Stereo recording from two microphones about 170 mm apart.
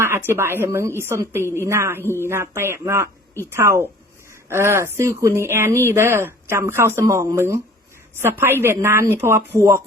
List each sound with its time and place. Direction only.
0.3 s speech: 15° right (ahead or behind)